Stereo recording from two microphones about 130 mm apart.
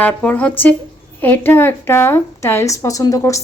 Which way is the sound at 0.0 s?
10° left (ahead or behind).